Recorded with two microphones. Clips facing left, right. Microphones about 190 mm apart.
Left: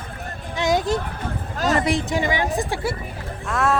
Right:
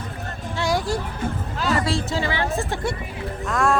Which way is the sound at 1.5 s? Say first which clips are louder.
Left 3 dB; 45° left (ahead or behind).